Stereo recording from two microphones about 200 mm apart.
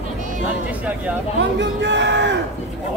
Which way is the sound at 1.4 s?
65° right (ahead or behind).